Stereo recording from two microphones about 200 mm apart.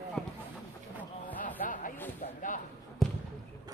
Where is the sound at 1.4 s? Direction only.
40° left (ahead or behind).